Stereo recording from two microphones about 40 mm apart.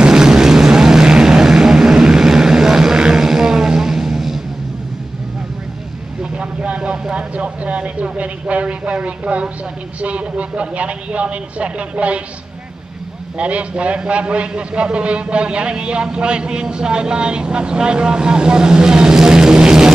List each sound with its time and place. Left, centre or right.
0.0 s vehicle: centre
6.3 s a sound: right
9.9 s speech: right
13.4 s a man's voice: right